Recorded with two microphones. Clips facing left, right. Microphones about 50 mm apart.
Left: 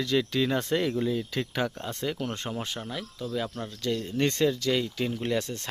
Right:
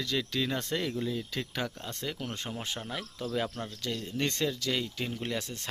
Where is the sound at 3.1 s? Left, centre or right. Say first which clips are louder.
Left 1 dB; right.